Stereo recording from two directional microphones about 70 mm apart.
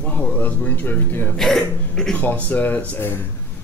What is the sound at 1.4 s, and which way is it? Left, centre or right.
Speech, centre.